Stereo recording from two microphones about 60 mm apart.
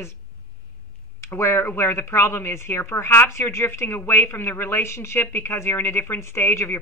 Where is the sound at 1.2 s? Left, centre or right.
Left.